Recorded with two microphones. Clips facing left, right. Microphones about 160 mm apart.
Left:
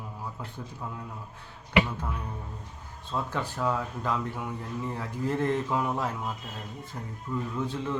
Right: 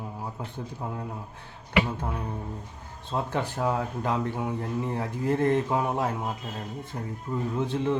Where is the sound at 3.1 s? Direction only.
25° right (ahead or behind).